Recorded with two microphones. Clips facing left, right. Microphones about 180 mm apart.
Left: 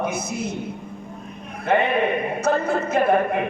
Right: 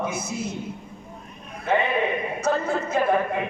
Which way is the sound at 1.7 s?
65° left (ahead or behind).